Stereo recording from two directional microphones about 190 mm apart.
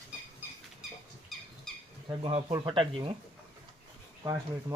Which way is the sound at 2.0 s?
25° right (ahead or behind).